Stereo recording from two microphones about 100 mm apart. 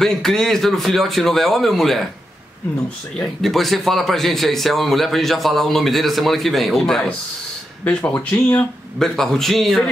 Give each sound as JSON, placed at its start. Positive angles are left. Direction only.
{"t": 0.0, "sound": "a man's voice", "side_deg": 5}
{"t": 3.2, "sound": "a man's voice", "side_deg": 0}
{"t": 8.0, "sound": "speech", "side_deg": 30}
{"t": 9.0, "sound": "a man's voice", "side_deg": 5}